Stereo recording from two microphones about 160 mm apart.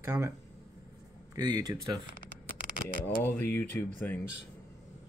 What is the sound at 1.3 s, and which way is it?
Speech, 25° right (ahead or behind).